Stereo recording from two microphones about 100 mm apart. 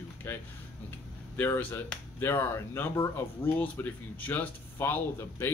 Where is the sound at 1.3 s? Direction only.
20° left (ahead or behind).